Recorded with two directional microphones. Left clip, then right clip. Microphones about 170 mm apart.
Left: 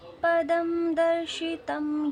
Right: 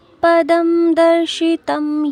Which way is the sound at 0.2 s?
45° right (ahead or behind).